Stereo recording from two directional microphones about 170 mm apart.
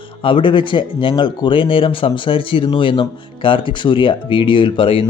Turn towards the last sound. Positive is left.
turn(degrees=30)  # may be behind; listen again after turning